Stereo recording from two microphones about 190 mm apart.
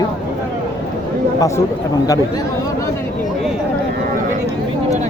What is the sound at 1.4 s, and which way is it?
Speech, 15° left (ahead or behind).